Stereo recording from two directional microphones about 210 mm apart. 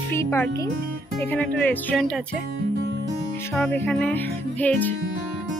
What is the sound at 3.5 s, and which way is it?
Music, 5° left (ahead or behind).